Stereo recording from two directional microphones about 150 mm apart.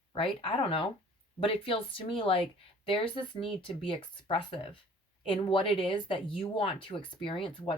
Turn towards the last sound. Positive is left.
turn(degrees=35)  # may be behind; listen again after turning